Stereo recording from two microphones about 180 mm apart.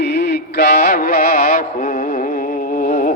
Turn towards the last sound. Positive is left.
turn(degrees=50)  # may be behind; listen again after turning